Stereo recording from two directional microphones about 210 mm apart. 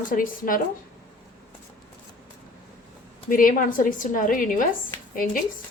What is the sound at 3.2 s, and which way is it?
A woman's voice, 40° left (ahead or behind).